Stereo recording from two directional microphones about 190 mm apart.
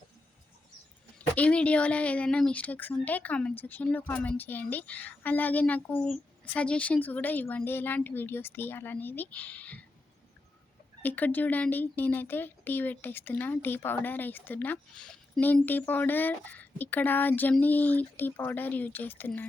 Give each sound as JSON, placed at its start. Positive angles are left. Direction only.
{"t": 1.4, "sound": "speech", "side_deg": 5}
{"t": 11.0, "sound": "speech", "side_deg": 10}